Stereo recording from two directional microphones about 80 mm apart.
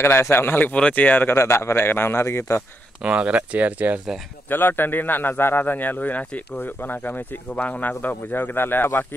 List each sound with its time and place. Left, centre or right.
0.0 s speech: left
3.0 s speech: centre
4.5 s speech: left